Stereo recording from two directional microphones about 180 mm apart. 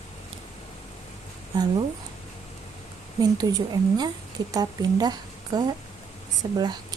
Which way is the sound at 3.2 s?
20° right (ahead or behind).